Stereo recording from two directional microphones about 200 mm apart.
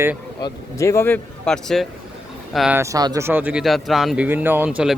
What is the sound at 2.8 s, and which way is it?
Speech, 15° right (ahead or behind).